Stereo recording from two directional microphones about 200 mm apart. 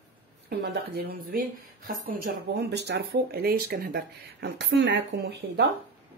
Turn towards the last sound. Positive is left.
turn(degrees=-60)  # may be behind; listen again after turning